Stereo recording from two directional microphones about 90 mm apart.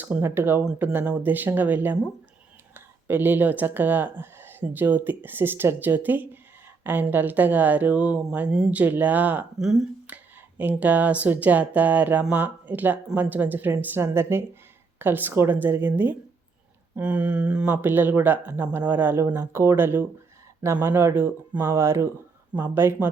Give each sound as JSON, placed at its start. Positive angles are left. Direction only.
{"t": 0.0, "sound": "speech", "side_deg": -25}
{"t": 9.6, "sound": "speech", "side_deg": -5}
{"t": 10.1, "sound": "a sound", "side_deg": -15}
{"t": 10.6, "sound": "speech", "side_deg": -20}